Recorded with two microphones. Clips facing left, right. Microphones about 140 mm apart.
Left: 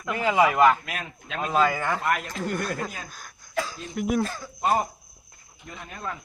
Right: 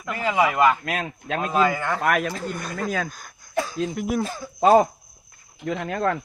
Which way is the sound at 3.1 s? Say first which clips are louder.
Right 3 dB; centre (ahead or behind).